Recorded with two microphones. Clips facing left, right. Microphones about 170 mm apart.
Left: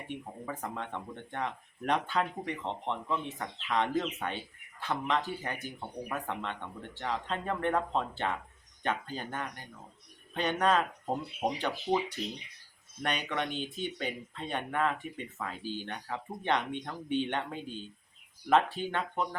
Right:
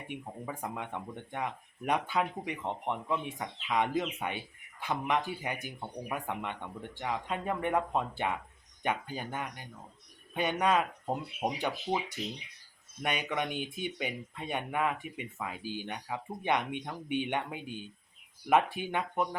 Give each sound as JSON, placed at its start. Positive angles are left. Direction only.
{"t": 0.1, "sound": "speech", "side_deg": -10}